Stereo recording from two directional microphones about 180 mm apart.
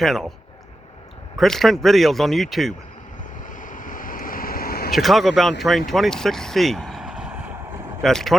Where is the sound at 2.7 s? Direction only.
45° left (ahead or behind).